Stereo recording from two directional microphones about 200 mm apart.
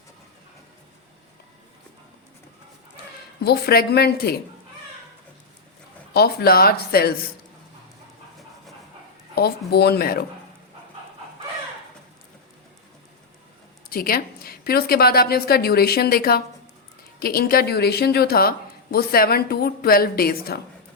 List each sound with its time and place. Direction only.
3.4 s a woman's voice: 50° left (ahead or behind)
6.1 s a woman's voice: 50° left (ahead or behind)
9.3 s a woman's voice: 55° left (ahead or behind)
13.9 s a woman's voice: 45° left (ahead or behind)